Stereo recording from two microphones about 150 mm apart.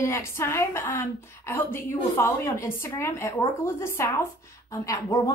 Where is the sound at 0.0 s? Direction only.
15° left (ahead or behind).